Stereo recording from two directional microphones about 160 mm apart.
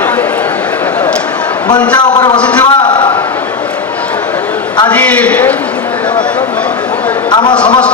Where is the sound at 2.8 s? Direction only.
30° left (ahead or behind).